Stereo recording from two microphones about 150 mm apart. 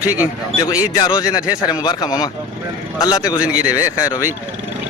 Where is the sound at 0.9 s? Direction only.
25° left (ahead or behind).